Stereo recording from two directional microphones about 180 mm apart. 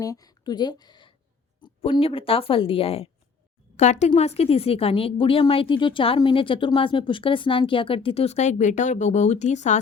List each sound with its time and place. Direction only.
0.0 s a woman's voice: 20° left (ahead or behind); by 9.8 s 40° left (ahead or behind)